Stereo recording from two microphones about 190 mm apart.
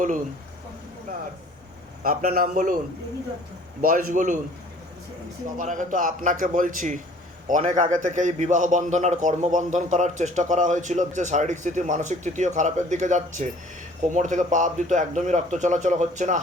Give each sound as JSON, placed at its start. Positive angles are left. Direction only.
{"t": 2.0, "sound": "a man's voice", "side_deg": -50}
{"t": 3.8, "sound": "a man's voice", "side_deg": -45}
{"t": 5.5, "sound": "a man's voice", "side_deg": -45}